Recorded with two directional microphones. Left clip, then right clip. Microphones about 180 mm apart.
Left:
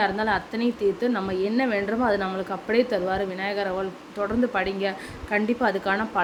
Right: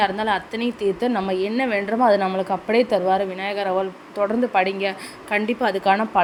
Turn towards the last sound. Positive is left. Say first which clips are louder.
# right 6 dB
turn(degrees=-15)  # may be behind; listen again after turning